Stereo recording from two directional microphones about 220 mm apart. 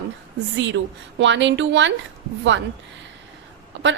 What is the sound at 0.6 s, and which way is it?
A woman's voice, 55° right (ahead or behind).